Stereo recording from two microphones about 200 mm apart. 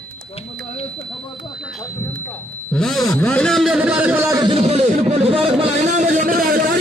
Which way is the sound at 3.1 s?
5° left (ahead or behind).